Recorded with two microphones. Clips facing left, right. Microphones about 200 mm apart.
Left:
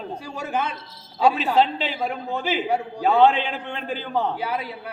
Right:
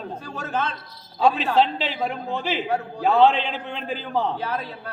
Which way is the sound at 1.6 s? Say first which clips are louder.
Even; centre (ahead or behind).